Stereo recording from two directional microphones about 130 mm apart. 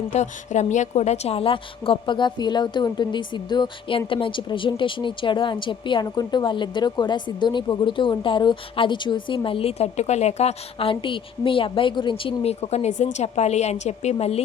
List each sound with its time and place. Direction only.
0.1 s a woman's voice: 65° left (ahead or behind)